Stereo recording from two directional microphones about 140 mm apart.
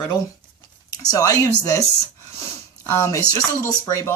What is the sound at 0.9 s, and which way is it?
Speech, 25° left (ahead or behind).